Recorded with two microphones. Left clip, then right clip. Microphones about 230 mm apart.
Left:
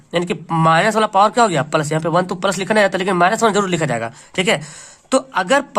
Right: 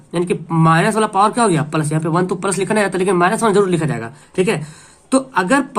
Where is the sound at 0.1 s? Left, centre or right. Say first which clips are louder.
Even; left.